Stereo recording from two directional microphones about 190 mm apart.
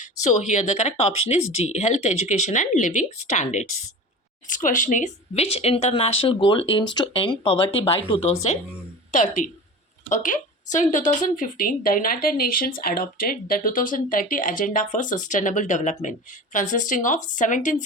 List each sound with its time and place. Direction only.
0.0 s a woman's voice: 40° left (ahead or behind)
9.1 s speech: 40° left (ahead or behind)